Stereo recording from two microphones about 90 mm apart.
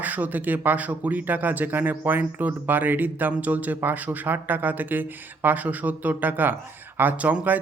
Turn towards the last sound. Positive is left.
turn(degrees=-20)  # may be behind; listen again after turning